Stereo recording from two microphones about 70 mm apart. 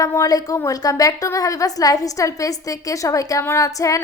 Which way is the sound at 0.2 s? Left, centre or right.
Left.